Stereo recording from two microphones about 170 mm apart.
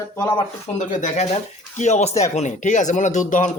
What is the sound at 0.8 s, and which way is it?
A man's voice, 45° left (ahead or behind).